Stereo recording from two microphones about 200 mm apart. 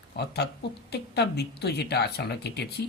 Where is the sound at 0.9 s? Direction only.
55° left (ahead or behind).